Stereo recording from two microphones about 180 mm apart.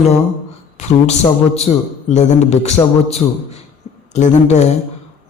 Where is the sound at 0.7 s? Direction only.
40° left (ahead or behind).